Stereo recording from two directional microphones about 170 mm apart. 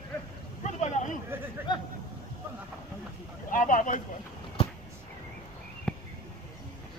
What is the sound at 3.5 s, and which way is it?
Speech, 50° left (ahead or behind).